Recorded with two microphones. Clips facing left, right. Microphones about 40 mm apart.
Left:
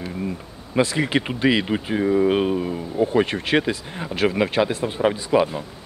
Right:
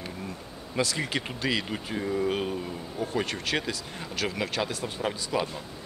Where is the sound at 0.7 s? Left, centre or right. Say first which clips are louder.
Left 9 dB; left.